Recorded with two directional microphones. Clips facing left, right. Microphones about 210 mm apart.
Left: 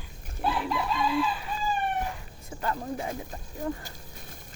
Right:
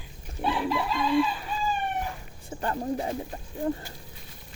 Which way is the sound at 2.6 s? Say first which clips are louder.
Right 3 dB; 35° right (ahead or behind).